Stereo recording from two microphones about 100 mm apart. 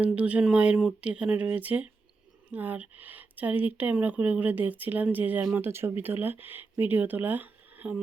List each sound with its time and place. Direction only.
0.0 s speech: 15° right (ahead or behind)